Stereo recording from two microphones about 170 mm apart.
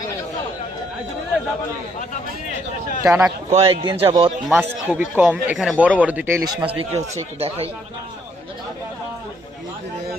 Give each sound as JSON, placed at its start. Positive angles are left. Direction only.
{"t": 3.0, "sound": "a man's voice", "side_deg": -20}
{"t": 3.5, "sound": "speech", "side_deg": -35}
{"t": 4.4, "sound": "speech", "side_deg": -10}
{"t": 6.6, "sound": "speech", "side_deg": -35}